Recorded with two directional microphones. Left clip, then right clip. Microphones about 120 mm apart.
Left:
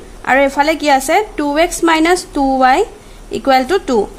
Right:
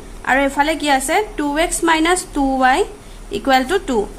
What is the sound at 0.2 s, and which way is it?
A woman's voice, 45° left (ahead or behind).